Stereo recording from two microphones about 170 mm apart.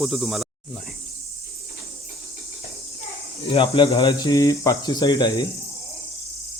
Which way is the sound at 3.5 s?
30° left (ahead or behind).